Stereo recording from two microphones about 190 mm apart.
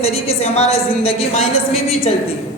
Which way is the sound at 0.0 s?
30° left (ahead or behind).